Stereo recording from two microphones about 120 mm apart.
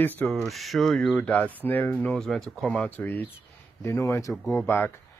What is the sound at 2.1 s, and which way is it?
Speech, centre (ahead or behind).